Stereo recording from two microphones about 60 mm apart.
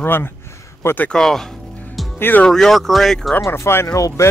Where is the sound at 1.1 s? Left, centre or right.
Centre.